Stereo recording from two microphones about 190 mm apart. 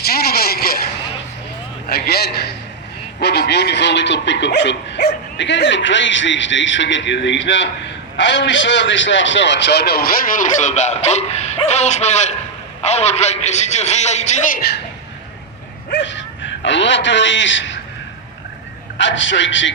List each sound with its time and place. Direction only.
0.0 s vehicle: 55° left (ahead or behind)
1.9 s a man's voice: 55° left (ahead or behind)
15.9 s speech: 70° left (ahead or behind)
18.9 s speech: 80° left